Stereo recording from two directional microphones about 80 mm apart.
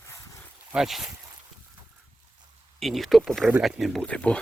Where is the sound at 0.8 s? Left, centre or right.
Centre.